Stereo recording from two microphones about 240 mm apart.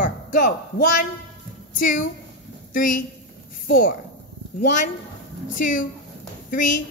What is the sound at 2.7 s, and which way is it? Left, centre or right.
Speech, left.